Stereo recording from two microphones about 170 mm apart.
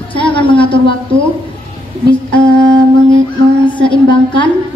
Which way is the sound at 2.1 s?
10° left (ahead or behind).